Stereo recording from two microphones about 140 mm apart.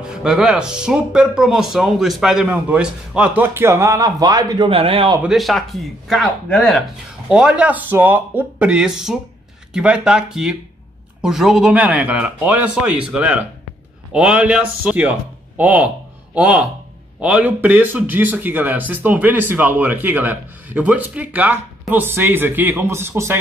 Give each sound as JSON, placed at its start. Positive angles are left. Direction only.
{"t": 0.0, "sound": "speech", "side_deg": -5}
{"t": 4.6, "sound": "a man's voice", "side_deg": -40}
{"t": 5.2, "sound": "speech", "side_deg": 0}